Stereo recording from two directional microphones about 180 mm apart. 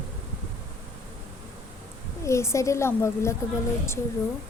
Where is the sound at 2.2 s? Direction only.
15° left (ahead or behind).